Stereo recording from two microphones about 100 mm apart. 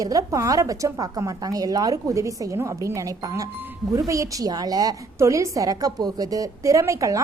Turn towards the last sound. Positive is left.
turn(degrees=-30)  # may be behind; listen again after turning